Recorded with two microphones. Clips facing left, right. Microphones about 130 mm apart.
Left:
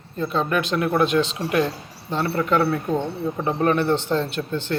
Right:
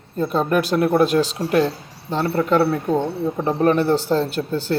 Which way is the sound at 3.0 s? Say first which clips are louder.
Right 3 dB; 15° right (ahead or behind).